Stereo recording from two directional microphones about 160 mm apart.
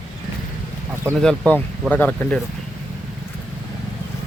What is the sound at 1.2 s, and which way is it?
Speech, 5° left (ahead or behind).